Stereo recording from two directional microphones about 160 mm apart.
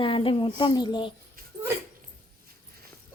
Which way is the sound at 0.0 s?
35° left (ahead or behind).